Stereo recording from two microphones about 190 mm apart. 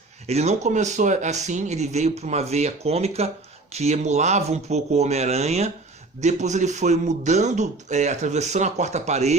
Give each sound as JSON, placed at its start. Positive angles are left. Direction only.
{"t": 0.3, "sound": "a man's voice", "side_deg": -35}